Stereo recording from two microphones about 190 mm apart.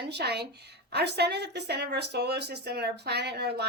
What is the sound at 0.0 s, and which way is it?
A woman's voice, 60° right (ahead or behind).